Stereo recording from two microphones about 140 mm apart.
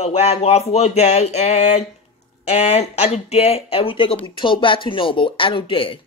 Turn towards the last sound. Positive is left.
turn(degrees=40)  # may be behind; listen again after turning